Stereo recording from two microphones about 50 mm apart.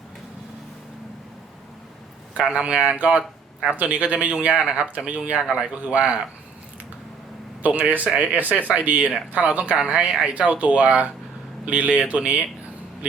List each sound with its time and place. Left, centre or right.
2.3 s speech: right
5.5 s speech: centre
5.8 s speech: right
7.6 s speech: right
9.8 s speech: centre
10.2 s speech: right